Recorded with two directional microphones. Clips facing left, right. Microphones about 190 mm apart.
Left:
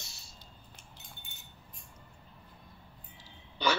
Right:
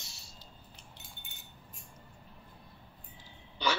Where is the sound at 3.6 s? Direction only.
50° left (ahead or behind).